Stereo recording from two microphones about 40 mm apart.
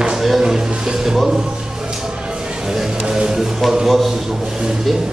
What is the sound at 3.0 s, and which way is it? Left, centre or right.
Speech, centre.